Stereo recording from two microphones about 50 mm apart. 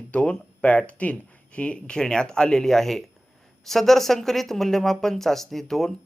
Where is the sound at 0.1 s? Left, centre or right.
Left.